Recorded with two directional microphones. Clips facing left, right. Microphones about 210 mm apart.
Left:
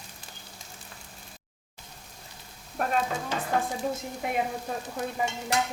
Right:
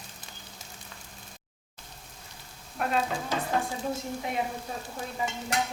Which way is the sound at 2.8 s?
40° left (ahead or behind).